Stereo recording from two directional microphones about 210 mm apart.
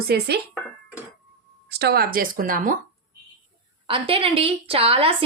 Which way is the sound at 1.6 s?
50° right (ahead or behind).